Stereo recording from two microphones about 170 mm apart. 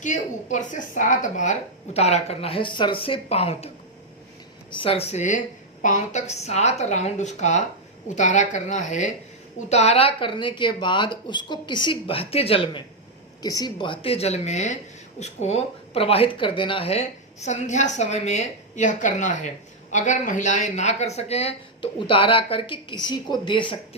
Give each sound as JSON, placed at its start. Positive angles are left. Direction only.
{"t": 0.0, "sound": "speech", "side_deg": 45}
{"t": 4.8, "sound": "a woman's voice", "side_deg": 35}
{"t": 13.4, "sound": "speech", "side_deg": 25}